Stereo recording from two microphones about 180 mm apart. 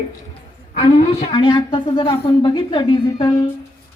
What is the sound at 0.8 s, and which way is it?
A woman's voice, 30° left (ahead or behind).